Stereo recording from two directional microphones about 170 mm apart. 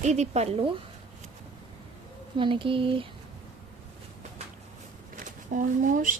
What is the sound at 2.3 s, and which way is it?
Speech, 30° right (ahead or behind).